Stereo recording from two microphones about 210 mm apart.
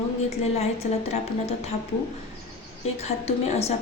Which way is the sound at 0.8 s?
35° left (ahead or behind).